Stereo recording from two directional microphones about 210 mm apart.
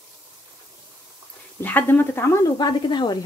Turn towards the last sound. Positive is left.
turn(degrees=20)  # may be behind; listen again after turning